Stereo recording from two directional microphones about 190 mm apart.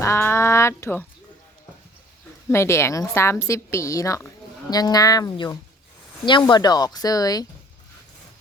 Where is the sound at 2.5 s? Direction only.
15° left (ahead or behind).